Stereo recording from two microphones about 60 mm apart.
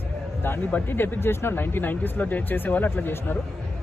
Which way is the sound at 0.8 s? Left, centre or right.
Left.